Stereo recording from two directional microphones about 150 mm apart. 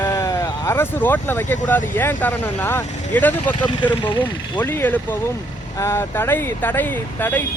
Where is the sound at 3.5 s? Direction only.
30° left (ahead or behind).